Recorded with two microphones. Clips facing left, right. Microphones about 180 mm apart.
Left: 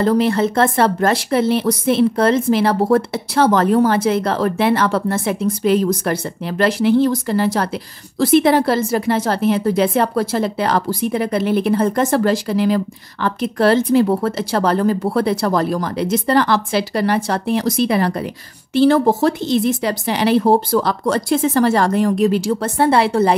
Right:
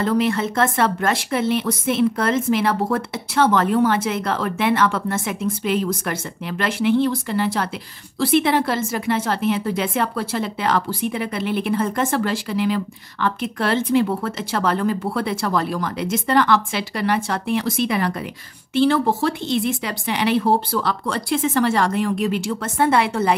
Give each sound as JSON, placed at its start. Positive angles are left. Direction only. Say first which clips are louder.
{"t": 0.0, "sound": "speech", "louder": "left 4 dB", "side_deg": 35}